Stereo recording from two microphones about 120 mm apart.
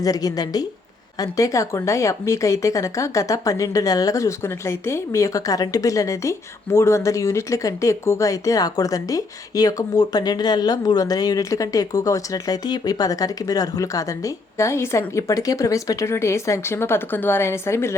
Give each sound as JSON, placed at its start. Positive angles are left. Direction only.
{"t": 0.0, "sound": "a woman's voice", "side_deg": 30}